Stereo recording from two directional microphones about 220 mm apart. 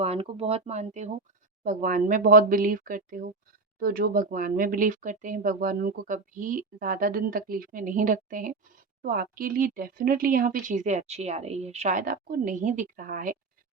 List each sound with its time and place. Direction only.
0.0 s speech: 25° right (ahead or behind)